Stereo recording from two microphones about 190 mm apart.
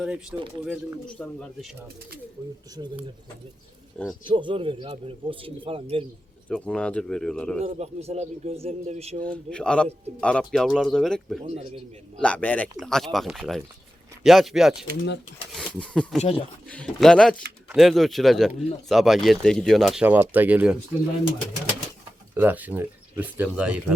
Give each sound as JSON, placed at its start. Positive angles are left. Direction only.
{"t": 0.0, "sound": "speech", "side_deg": -5}
{"t": 3.9, "sound": "speech", "side_deg": 5}
{"t": 4.3, "sound": "speech", "side_deg": -25}
{"t": 6.5, "sound": "speech", "side_deg": 5}
{"t": 7.6, "sound": "speech", "side_deg": -35}
{"t": 9.2, "sound": "speech", "side_deg": 5}
{"t": 11.4, "sound": "speech", "side_deg": -30}
{"t": 12.2, "sound": "speech", "side_deg": 5}
{"t": 22.4, "sound": "speech", "side_deg": -10}